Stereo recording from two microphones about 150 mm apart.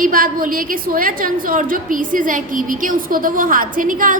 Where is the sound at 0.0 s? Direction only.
70° right (ahead or behind).